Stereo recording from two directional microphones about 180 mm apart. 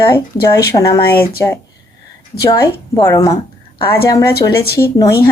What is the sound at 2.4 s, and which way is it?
Speech, 20° left (ahead or behind).